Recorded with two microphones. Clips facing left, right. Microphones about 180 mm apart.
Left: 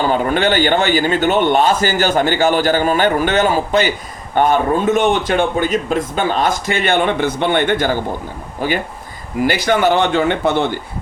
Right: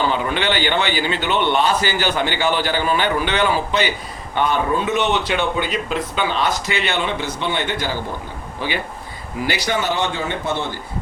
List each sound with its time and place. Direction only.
0.0 s a man's voice: 45° left (ahead or behind); by 10.7 s 65° left (ahead or behind)